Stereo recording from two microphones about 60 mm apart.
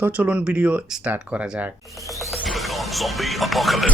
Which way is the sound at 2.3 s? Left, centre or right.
Centre.